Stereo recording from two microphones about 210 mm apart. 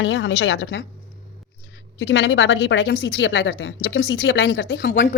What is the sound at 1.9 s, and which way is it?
A woman's voice, 55° left (ahead or behind).